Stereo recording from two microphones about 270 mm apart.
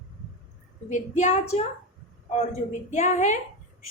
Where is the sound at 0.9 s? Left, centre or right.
Left.